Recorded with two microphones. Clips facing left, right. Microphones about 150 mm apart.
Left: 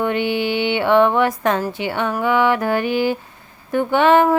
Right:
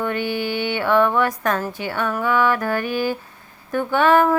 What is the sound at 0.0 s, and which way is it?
Music, 20° left (ahead or behind).